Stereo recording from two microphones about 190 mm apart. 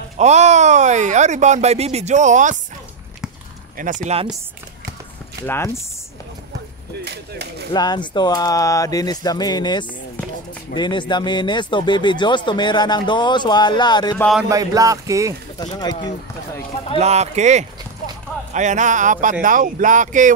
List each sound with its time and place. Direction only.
0.2 s speech: 35° right (ahead or behind)
3.7 s speech: 40° right (ahead or behind)
7.1 s a sound: 60° right (ahead or behind)
7.7 s speech: 20° left (ahead or behind)
14.1 s a sound: 5° left (ahead or behind)
14.5 s speech: 20° right (ahead or behind)
15.6 s speech: 20° left (ahead or behind)
17.0 s speech: 35° right (ahead or behind)